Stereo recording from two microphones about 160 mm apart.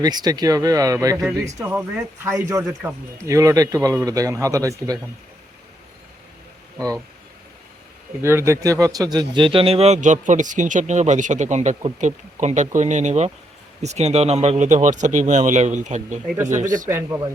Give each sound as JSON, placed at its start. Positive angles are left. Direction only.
{"t": 0.0, "sound": "speech", "side_deg": -25}
{"t": 6.7, "sound": "speech", "side_deg": -20}
{"t": 8.2, "sound": "speech", "side_deg": -15}